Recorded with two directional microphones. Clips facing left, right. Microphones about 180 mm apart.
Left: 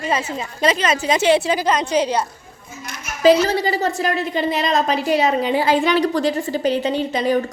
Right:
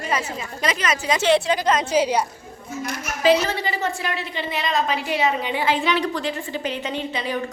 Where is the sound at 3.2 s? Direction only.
40° left (ahead or behind).